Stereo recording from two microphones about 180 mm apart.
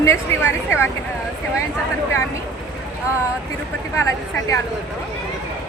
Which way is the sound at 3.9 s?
15° left (ahead or behind).